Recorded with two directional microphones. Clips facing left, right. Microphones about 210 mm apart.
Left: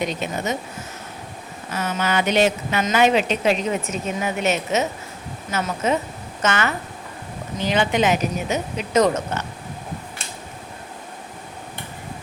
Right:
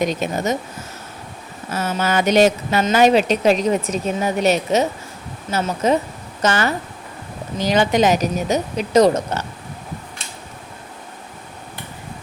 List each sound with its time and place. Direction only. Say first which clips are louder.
0.0 s speech: right 4 dB; 45° right (ahead or behind)
1.7 s a woman's voice: right 3 dB; 40° right (ahead or behind)